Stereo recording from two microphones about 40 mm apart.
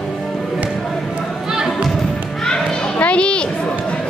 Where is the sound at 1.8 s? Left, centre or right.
Centre.